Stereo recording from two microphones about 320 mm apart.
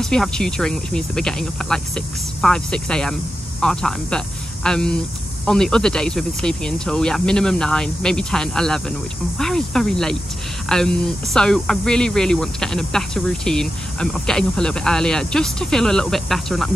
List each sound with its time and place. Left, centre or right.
0.0 s speech: centre